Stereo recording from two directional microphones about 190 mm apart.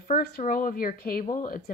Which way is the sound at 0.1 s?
50° left (ahead or behind).